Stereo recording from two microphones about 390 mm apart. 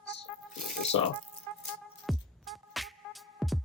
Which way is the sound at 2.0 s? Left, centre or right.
Centre.